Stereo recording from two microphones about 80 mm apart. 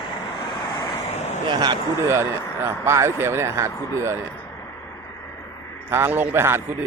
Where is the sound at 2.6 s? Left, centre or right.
Right.